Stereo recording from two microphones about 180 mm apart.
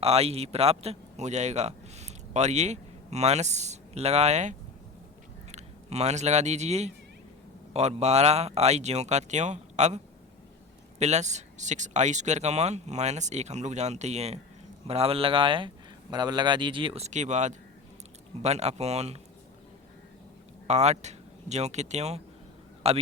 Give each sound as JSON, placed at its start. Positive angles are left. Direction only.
{"t": 0.0, "sound": "a man's voice", "side_deg": -35}
{"t": 11.0, "sound": "a man's voice", "side_deg": -40}
{"t": 20.7, "sound": "speech", "side_deg": -40}